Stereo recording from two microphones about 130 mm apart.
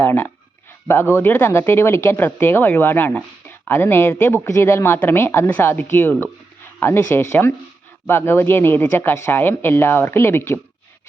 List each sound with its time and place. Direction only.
0.0 s speech: 15° left (ahead or behind)